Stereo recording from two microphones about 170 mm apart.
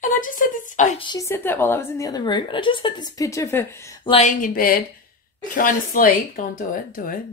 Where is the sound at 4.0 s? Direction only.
30° left (ahead or behind).